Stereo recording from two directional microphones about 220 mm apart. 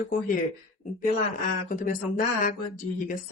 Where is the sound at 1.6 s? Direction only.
40° left (ahead or behind).